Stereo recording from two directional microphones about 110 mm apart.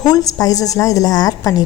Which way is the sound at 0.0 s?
35° left (ahead or behind).